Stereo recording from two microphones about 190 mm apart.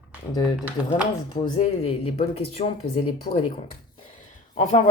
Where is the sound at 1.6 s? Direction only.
30° left (ahead or behind).